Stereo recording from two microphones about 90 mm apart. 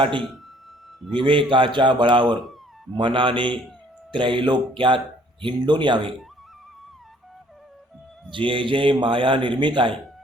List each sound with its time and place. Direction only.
0.0 s a man's voice: 70° right (ahead or behind)
8.3 s a man's voice: 70° right (ahead or behind)